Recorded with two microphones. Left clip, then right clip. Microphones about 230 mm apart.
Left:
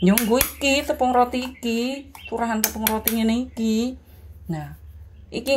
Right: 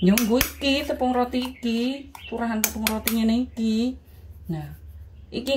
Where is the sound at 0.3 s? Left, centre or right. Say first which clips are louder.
Left 3 dB; left.